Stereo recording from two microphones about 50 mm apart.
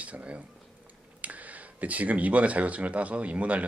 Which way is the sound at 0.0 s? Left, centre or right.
Right.